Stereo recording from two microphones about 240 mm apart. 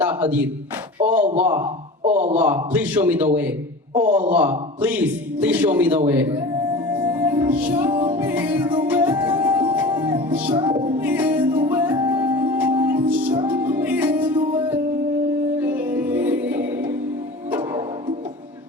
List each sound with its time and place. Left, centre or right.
0.0 s a sound: centre
0.9 s a man's voice: centre
2.0 s speech: right
2.3 s a man's voice: centre
6.9 s music: centre